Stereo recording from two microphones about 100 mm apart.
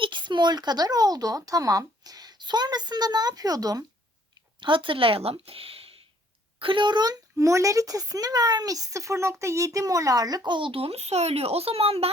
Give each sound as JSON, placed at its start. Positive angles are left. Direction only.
{"t": 0.0, "sound": "speech", "side_deg": -50}
{"t": 4.6, "sound": "speech", "side_deg": -60}
{"t": 6.6, "sound": "speech", "side_deg": -60}